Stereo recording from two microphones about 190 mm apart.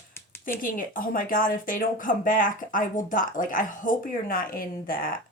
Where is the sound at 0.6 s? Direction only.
45° left (ahead or behind).